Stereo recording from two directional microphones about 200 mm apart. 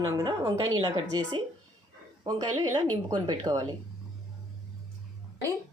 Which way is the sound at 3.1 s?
20° right (ahead or behind).